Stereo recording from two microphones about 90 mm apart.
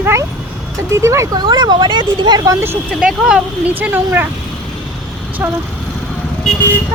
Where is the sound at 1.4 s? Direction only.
50° right (ahead or behind).